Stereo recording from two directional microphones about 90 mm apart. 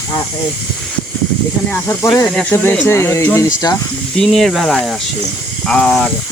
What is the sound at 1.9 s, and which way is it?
Speech, 30° left (ahead or behind).